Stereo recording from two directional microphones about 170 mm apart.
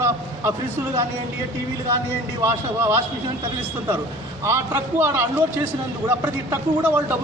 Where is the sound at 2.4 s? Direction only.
15° right (ahead or behind).